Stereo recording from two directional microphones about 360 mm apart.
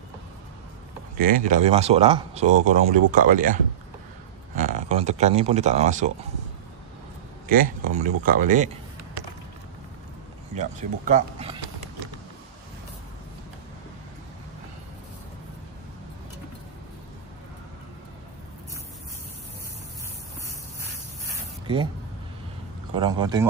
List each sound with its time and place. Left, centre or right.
1.2 s speech: right
4.6 s speech: right
7.4 s speech: right
10.5 s speech: centre
22.9 s speech: centre